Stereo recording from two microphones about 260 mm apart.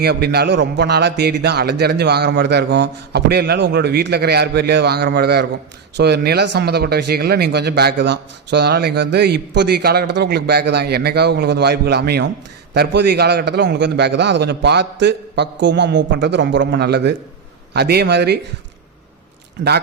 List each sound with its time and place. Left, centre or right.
0.0 s speech: right